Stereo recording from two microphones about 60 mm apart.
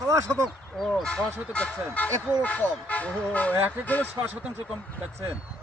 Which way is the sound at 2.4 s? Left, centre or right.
Left.